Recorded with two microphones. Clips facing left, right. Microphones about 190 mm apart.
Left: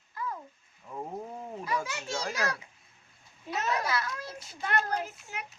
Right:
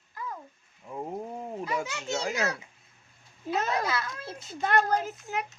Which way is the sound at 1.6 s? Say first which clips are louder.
Right 1 dB; 20° right (ahead or behind).